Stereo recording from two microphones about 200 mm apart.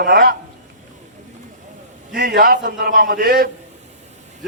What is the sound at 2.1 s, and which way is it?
A man's voice, 50° right (ahead or behind).